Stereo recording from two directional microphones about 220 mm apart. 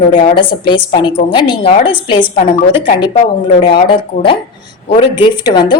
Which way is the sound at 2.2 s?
35° left (ahead or behind).